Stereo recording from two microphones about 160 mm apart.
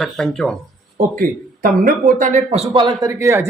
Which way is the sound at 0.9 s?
60° right (ahead or behind).